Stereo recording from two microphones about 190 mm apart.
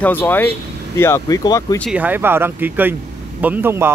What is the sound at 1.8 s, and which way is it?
A man's voice, 5° right (ahead or behind).